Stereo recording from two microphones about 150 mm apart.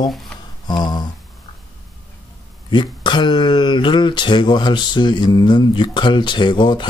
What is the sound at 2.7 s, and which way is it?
Speech, 30° left (ahead or behind).